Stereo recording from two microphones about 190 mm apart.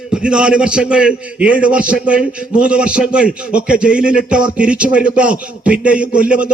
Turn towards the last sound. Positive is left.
turn(degrees=-5)  # may be behind; listen again after turning